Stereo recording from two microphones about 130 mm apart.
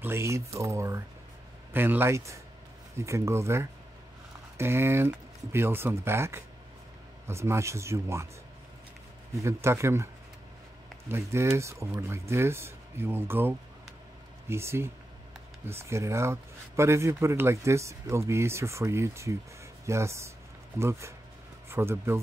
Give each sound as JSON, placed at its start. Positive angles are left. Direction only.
{"t": 0.0, "sound": "a man's voice", "side_deg": -20}
{"t": 9.3, "sound": "speech", "side_deg": -20}
{"t": 11.1, "sound": "speech", "side_deg": -20}